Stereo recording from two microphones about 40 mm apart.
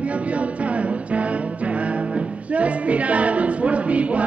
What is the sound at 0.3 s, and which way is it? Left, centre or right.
Music, right.